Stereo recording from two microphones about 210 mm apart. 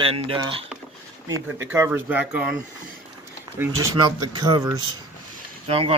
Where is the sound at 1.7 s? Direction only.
10° right (ahead or behind).